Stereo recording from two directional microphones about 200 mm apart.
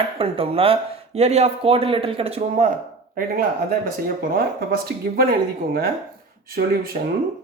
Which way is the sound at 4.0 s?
45° right (ahead or behind).